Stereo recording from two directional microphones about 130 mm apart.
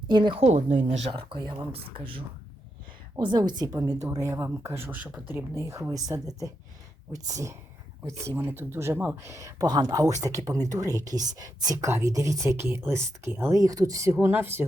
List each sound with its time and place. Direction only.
0.1 s a woman's voice: 35° right (ahead or behind)
0.4 s a woman's voice: 65° right (ahead or behind); by 14.6 s 20° right (ahead or behind)